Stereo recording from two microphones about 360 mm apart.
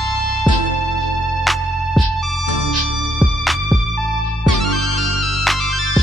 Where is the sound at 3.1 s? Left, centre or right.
Centre.